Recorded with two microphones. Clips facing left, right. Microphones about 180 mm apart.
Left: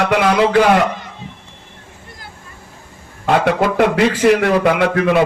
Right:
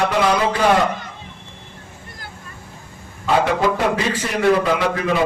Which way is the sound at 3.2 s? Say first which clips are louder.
Left 2 dB; 60° left (ahead or behind).